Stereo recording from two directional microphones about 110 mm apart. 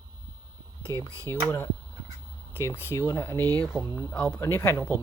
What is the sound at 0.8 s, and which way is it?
Speech, 30° right (ahead or behind).